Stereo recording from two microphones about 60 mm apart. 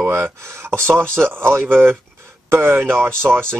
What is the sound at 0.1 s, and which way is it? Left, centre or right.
Speech, right.